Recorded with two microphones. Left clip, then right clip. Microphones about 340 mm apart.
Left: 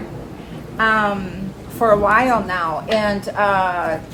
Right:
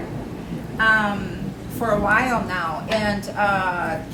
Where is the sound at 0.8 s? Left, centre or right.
Left.